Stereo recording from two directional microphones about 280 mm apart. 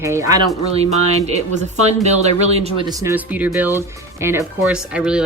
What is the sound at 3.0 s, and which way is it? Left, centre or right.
A woman's voice, centre.